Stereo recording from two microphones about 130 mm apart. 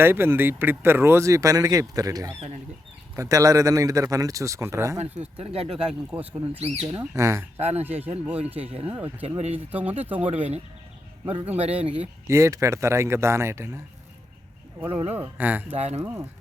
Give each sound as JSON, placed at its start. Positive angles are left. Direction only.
{"t": 0.0, "sound": "speech", "side_deg": -20}
{"t": 4.9, "sound": "speech", "side_deg": -55}
{"t": 7.0, "sound": "speech", "side_deg": -20}
{"t": 7.5, "sound": "speech", "side_deg": -55}
{"t": 8.3, "sound": "speech", "side_deg": -10}
{"t": 9.2, "sound": "speech", "side_deg": -50}
{"t": 10.0, "sound": "speech", "side_deg": -15}
{"t": 11.3, "sound": "speech", "side_deg": -50}
{"t": 12.3, "sound": "speech", "side_deg": -20}
{"t": 14.8, "sound": "speech", "side_deg": -45}
{"t": 15.4, "sound": "speech", "side_deg": -15}
{"t": 15.7, "sound": "speech", "side_deg": -55}
{"t": 16.0, "sound": "speech", "side_deg": -25}